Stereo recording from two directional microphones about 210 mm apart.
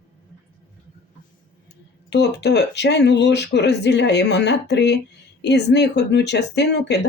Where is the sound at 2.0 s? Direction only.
55° left (ahead or behind).